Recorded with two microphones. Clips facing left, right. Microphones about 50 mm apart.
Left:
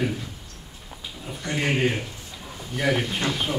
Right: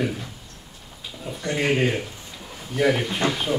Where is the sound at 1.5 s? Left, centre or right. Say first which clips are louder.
Right 2 dB; centre.